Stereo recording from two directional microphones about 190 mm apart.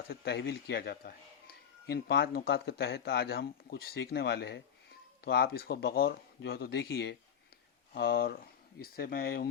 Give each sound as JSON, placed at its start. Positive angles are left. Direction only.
{"t": 0.1, "sound": "a man's voice", "side_deg": 60}